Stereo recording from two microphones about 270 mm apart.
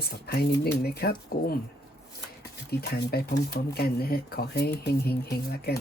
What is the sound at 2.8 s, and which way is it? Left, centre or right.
Speech, left.